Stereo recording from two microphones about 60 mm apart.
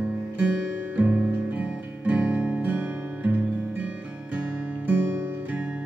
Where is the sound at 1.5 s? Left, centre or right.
Right.